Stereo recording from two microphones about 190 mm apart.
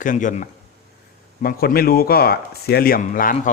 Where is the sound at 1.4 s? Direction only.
50° left (ahead or behind).